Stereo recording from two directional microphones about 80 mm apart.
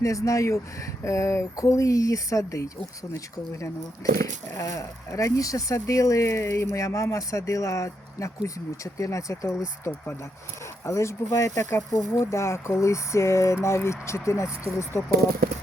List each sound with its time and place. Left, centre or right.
0.0 s speech: left
4.2 s speech: left